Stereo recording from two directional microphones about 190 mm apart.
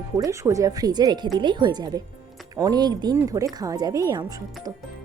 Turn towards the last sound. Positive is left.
turn(degrees=-20)  # may be behind; listen again after turning